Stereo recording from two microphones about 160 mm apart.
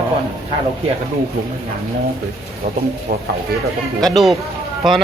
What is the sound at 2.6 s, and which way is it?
Speech, 60° right (ahead or behind).